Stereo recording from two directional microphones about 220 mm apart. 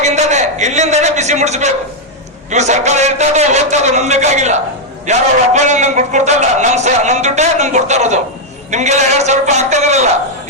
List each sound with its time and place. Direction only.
0.0 s a man's voice: 30° right (ahead or behind)